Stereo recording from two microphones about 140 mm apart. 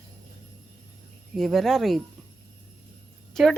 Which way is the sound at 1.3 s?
Centre (ahead or behind).